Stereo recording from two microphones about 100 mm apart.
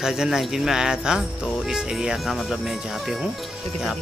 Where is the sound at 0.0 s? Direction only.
5° right (ahead or behind).